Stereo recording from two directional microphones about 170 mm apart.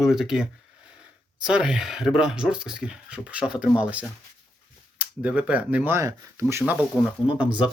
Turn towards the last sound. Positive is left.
turn(degrees=-5)  # may be behind; listen again after turning